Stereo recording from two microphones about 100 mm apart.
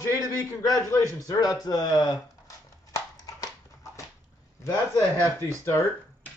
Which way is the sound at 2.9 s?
35° left (ahead or behind).